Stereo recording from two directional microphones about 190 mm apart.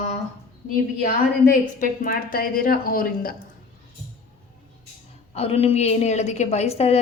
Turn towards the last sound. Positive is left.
turn(degrees=35)  # may be behind; listen again after turning